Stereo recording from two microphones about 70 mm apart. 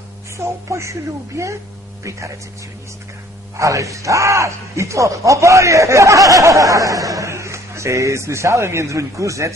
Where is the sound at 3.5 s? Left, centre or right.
Right.